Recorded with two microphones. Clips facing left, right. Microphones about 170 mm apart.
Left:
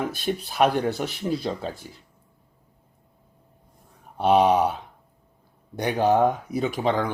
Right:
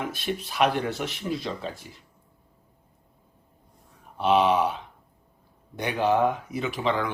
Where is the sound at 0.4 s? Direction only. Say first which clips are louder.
Left 3 dB; 35° left (ahead or behind).